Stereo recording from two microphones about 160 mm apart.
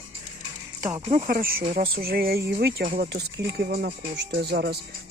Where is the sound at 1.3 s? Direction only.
65° right (ahead or behind); by 4.2 s 80° right.